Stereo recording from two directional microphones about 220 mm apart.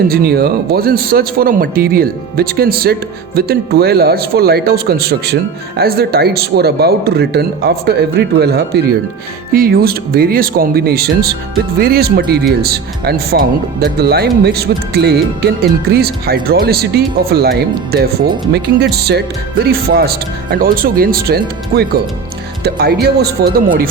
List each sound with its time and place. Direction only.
0.1 s speech: 45° right (ahead or behind)